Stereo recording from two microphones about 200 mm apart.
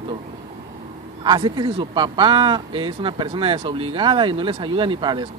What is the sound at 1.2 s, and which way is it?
Speech, 25° right (ahead or behind).